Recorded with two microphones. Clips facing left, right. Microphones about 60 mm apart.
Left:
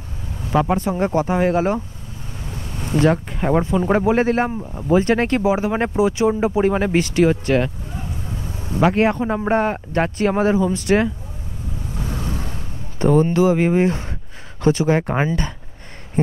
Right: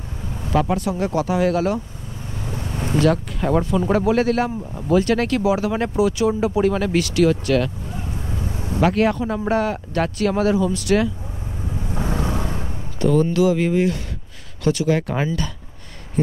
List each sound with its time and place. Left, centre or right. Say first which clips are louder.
0.5 s speech: left 2 dB; left
2.4 s vehicle: right 4 dB; right
3.0 s speech: left 1 dB; left
11.9 s vehicle: right 4 dB; right
13.0 s speech: left 2 dB; left